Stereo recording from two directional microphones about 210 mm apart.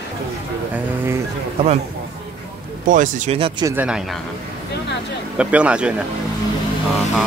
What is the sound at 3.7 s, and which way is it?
Speech, 5° right (ahead or behind).